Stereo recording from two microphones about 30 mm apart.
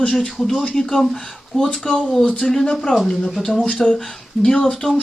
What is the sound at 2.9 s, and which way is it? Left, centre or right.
Speech, left.